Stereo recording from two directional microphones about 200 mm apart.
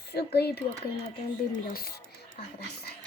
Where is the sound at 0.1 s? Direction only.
55° left (ahead or behind).